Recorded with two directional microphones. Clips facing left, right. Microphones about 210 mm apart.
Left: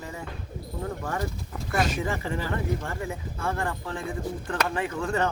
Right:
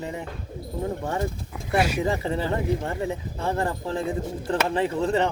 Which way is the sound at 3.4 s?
35° right (ahead or behind).